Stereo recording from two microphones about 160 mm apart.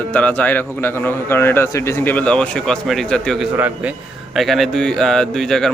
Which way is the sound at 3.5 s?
10° right (ahead or behind).